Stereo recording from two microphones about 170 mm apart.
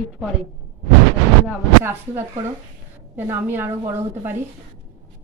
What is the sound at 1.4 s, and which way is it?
A woman's voice, 15° right (ahead or behind).